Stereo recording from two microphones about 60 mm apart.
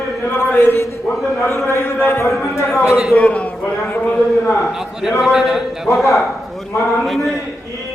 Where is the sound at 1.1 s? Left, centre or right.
Centre.